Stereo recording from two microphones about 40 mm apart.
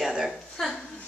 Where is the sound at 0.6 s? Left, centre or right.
Centre.